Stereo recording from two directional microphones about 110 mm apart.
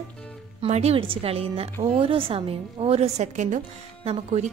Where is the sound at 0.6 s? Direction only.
70° right (ahead or behind); by 3.6 s 90° right.